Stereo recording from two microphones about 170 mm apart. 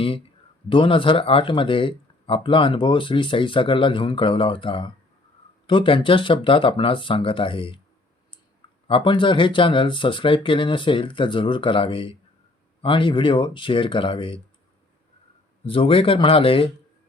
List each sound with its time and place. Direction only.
0.7 s speech: 30° left (ahead or behind)
8.9 s speech: 30° left (ahead or behind)
15.6 s speech: 30° left (ahead or behind)